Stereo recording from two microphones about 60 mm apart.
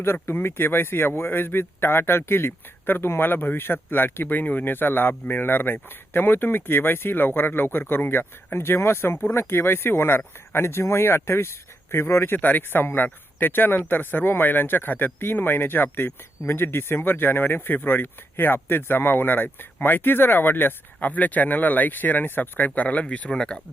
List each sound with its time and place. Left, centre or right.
0.0 s speech: left
8.5 s speech: left
23.3 s speech: centre